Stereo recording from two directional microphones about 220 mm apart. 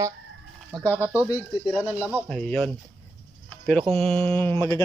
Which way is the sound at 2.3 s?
5° left (ahead or behind).